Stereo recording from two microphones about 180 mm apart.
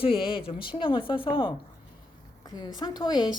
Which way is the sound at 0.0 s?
30° left (ahead or behind).